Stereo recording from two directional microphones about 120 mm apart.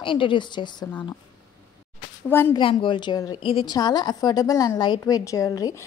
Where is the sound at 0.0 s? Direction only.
45° left (ahead or behind).